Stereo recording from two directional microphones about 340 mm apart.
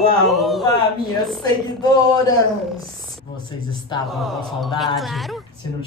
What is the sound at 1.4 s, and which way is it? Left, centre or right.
Speech, centre.